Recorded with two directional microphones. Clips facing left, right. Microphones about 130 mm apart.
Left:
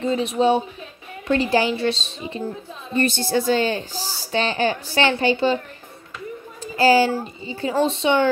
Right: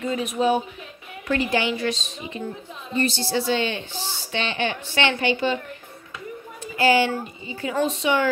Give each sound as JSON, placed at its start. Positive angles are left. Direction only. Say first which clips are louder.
{"t": 0.0, "sound": "speech", "louder": "left 3 dB", "side_deg": 30}
{"t": 2.9, "sound": "speech", "louder": "left 3 dB", "side_deg": 55}
{"t": 6.6, "sound": "speech", "louder": "left 3 dB", "side_deg": 35}